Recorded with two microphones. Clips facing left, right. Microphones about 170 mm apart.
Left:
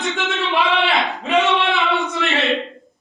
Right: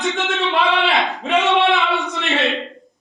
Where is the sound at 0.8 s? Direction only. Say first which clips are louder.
Right 1 dB; centre (ahead or behind).